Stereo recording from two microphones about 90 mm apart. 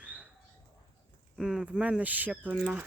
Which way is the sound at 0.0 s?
15° right (ahead or behind).